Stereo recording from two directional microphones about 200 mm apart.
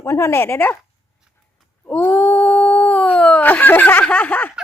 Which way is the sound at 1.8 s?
10° left (ahead or behind).